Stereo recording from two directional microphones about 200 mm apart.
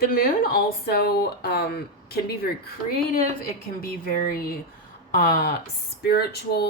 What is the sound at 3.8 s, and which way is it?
A woman's voice, 45° left (ahead or behind).